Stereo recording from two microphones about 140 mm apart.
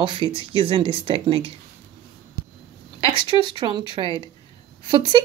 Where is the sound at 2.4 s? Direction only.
90° right.